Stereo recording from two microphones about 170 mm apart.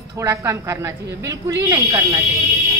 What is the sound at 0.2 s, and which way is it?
A woman's voice, 15° right (ahead or behind).